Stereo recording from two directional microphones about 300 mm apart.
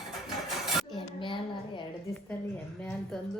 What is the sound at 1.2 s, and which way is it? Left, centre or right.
Speech, centre.